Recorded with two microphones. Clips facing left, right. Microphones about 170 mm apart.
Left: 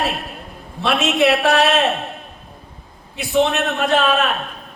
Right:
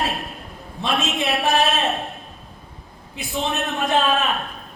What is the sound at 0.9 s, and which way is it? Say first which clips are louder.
Speech: left 7 dB; 70° left (ahead or behind).